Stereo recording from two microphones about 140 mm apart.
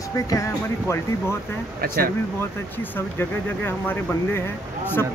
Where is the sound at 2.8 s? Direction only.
15° left (ahead or behind).